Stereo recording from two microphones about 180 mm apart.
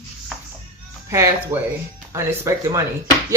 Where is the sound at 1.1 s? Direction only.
15° right (ahead or behind).